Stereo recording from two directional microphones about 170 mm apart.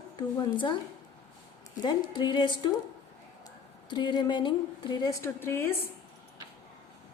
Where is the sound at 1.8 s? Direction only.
25° left (ahead or behind).